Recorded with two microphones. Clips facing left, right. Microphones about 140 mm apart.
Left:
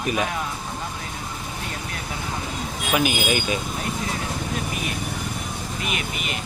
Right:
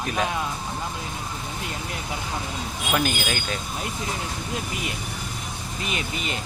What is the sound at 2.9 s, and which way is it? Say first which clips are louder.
Speech: left 3 dB; 5° left (ahead or behind).